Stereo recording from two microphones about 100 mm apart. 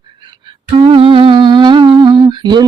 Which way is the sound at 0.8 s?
60° right (ahead or behind).